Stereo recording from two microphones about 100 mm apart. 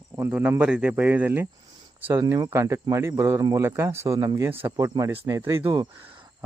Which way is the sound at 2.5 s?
30° right (ahead or behind).